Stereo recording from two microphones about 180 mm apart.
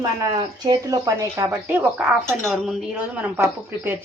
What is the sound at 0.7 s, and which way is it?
Speech, 20° right (ahead or behind).